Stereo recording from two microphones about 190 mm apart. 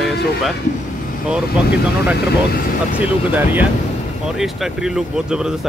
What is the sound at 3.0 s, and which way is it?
Speech, 10° right (ahead or behind).